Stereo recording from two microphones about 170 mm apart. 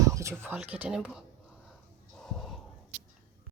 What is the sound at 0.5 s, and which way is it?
Speech, 5° right (ahead or behind).